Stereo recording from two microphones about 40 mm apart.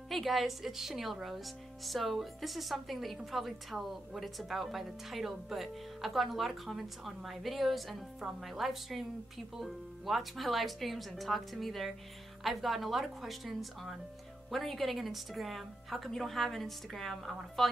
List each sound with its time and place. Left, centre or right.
0.1 s speech: centre